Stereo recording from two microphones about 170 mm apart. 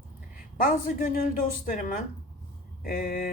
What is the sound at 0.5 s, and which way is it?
Speech, 50° left (ahead or behind).